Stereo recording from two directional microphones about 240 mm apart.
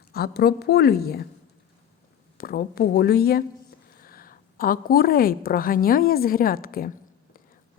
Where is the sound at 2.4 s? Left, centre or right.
Left.